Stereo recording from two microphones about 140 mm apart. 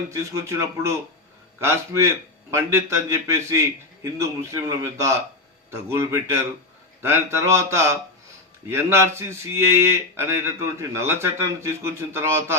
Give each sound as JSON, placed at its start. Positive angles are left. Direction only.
{"t": 0.1, "sound": "a man's voice", "side_deg": -20}